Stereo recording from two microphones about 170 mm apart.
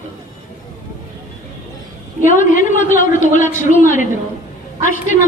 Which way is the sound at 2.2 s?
50° left (ahead or behind).